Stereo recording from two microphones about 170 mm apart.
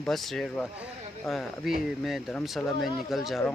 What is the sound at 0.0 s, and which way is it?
Speech, centre (ahead or behind).